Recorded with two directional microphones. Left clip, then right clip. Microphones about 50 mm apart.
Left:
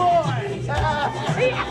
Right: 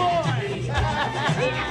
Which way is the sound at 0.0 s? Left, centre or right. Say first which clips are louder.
Left 4 dB; right.